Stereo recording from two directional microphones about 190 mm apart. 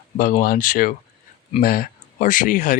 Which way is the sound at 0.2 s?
45° left (ahead or behind).